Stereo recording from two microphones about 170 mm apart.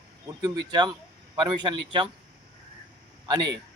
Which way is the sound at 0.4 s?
25° right (ahead or behind).